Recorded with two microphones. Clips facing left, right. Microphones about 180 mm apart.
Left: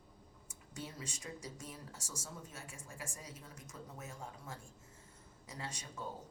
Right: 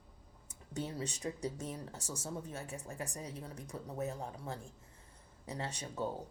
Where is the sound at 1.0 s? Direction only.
35° right (ahead or behind).